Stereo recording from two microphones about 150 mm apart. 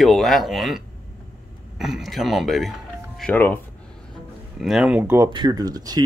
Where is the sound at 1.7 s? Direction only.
Centre (ahead or behind).